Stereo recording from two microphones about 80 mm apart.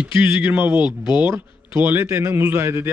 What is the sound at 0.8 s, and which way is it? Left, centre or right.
Speech, left.